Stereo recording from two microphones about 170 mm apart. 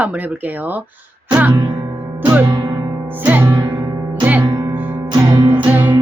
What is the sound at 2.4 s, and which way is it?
Music, 30° right (ahead or behind).